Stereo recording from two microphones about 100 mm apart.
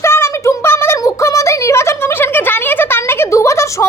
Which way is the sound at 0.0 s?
25° left (ahead or behind).